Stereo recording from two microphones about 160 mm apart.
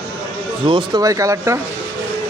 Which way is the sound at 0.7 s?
25° right (ahead or behind).